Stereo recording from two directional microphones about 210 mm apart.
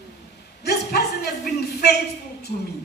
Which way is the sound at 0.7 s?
50° left (ahead or behind).